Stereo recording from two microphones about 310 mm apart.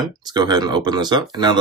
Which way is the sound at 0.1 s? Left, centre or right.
Centre.